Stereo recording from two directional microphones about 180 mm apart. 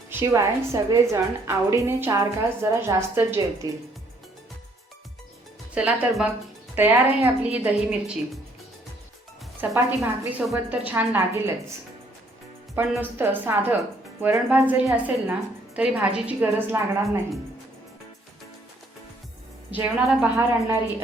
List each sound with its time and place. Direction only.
0.1 s a woman's voice: 15° right (ahead or behind)
5.7 s a woman's voice: 5° right (ahead or behind)
9.6 s a woman's voice: 15° right (ahead or behind)
12.7 s a woman's voice: 10° right (ahead or behind)
19.7 s a woman's voice: 10° right (ahead or behind)